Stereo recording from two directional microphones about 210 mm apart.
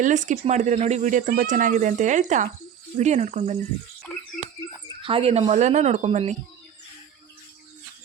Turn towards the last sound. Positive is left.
turn(degrees=-35)  # may be behind; listen again after turning